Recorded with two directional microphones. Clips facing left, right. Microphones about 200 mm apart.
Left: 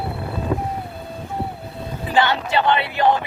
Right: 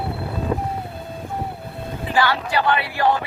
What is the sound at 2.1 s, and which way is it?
Speech, 25° left (ahead or behind).